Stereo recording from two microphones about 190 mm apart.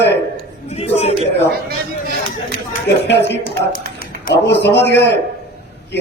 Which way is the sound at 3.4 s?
50° left (ahead or behind).